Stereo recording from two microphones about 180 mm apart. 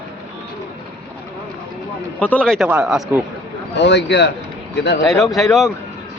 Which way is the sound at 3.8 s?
75° left (ahead or behind).